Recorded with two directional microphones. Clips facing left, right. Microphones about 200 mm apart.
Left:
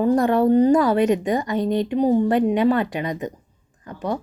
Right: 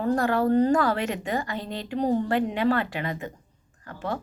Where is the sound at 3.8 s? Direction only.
20° left (ahead or behind).